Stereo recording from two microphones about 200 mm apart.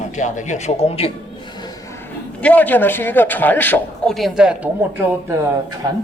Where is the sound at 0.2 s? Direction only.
35° left (ahead or behind).